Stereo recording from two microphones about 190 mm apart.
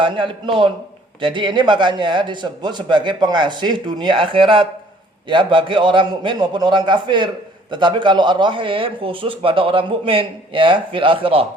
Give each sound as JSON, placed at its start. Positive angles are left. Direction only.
{"t": 0.0, "sound": "speech", "side_deg": -25}